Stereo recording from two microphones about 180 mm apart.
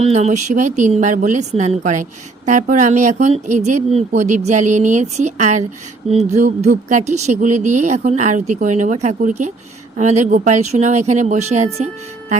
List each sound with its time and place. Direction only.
0.0 s speech: 35° right (ahead or behind)